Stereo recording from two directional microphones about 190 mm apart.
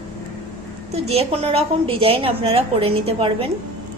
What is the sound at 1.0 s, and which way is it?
A woman's voice, 30° right (ahead or behind).